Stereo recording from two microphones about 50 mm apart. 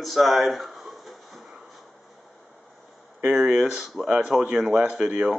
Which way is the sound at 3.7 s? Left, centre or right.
Centre.